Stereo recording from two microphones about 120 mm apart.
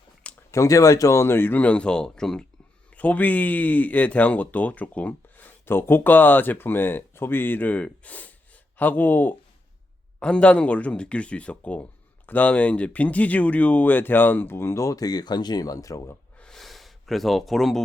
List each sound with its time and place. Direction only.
0.5 s speech: 25° left (ahead or behind)
16.4 s gasp: 5° left (ahead or behind)